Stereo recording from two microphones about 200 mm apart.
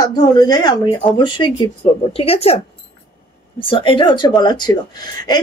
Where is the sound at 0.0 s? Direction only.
20° left (ahead or behind).